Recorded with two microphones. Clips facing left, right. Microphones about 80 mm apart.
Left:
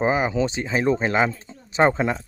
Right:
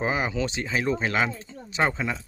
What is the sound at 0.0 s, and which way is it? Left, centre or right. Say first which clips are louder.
Speech: left 5 dB; left.